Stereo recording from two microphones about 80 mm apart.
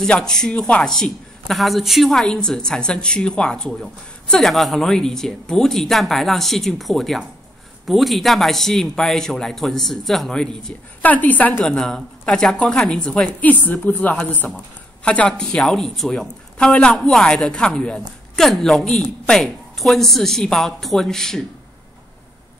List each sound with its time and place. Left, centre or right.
0.0 s a woman's voice: centre
11.0 s a woman's voice: left
11.6 s speech: centre
13.4 s a woman's voice: left